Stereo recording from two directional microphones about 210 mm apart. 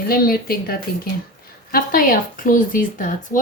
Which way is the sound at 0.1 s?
45° left (ahead or behind).